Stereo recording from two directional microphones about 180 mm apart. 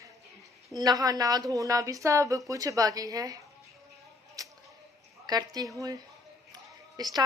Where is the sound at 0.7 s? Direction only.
20° right (ahead or behind).